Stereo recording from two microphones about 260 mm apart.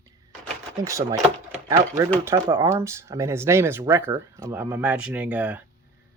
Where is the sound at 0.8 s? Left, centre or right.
Centre.